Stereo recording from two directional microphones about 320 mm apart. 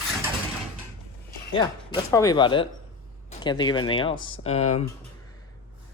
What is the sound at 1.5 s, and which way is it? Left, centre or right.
Speech, centre.